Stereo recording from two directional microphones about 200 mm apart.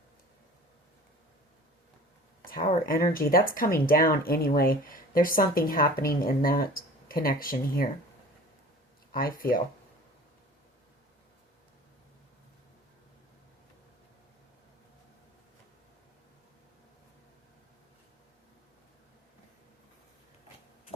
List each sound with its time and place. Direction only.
2.8 s speech: 45° left (ahead or behind)
9.1 s speech: 45° left (ahead or behind)